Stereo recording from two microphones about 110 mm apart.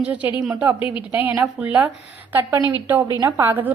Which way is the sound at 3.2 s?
20° right (ahead or behind).